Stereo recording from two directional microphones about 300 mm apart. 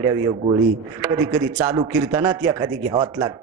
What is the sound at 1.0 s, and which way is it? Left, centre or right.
A woman's voice, centre.